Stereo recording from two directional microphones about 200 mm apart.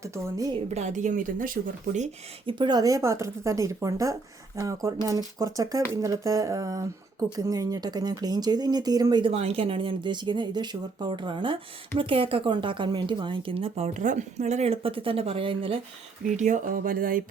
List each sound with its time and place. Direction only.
0.7 s speech: 35° right (ahead or behind)
2.5 s speech: 20° right (ahead or behind)
16.4 s music: 40° right (ahead or behind)